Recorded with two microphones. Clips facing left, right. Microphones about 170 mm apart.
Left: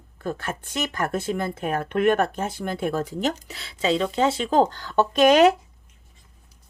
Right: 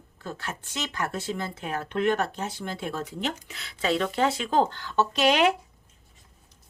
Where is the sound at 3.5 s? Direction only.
30° left (ahead or behind).